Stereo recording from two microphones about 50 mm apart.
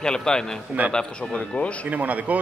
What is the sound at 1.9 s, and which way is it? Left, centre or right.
Speech, right.